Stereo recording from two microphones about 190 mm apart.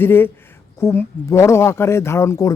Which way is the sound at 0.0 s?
10° left (ahead or behind).